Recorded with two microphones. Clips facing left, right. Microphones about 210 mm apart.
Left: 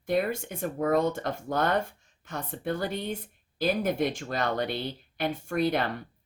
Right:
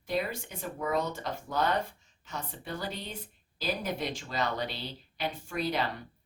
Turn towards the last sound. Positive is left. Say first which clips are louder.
# left 5 dB
turn(degrees=55)  # may be behind; listen again after turning